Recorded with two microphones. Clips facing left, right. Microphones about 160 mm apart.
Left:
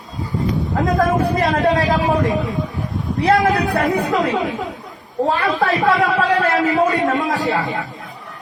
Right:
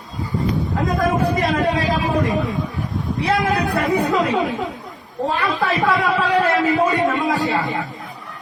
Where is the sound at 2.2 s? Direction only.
Centre (ahead or behind).